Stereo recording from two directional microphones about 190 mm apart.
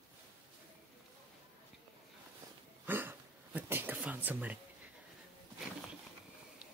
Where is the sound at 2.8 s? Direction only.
10° right (ahead or behind).